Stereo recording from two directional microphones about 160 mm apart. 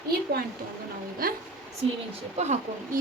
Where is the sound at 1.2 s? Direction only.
65° right (ahead or behind).